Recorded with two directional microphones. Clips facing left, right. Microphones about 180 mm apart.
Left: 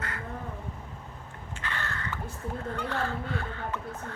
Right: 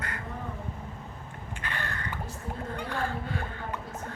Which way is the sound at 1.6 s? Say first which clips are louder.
Left 1 dB; 15° right (ahead or behind).